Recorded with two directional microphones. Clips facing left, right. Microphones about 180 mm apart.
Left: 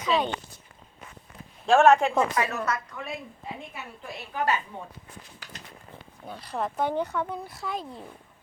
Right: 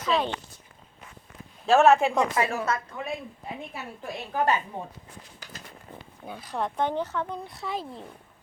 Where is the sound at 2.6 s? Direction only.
30° right (ahead or behind).